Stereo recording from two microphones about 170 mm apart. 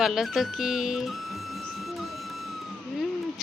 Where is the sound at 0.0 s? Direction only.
Centre (ahead or behind).